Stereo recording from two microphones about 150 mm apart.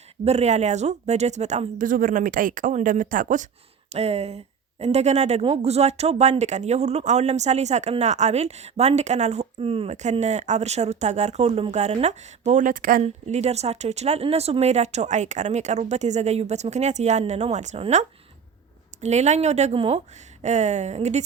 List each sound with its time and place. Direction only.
0.3 s speech: 50° right (ahead or behind)
3.9 s speech: 45° right (ahead or behind); by 13.0 s 65° right (ahead or behind)
13.0 s speech: 50° right (ahead or behind)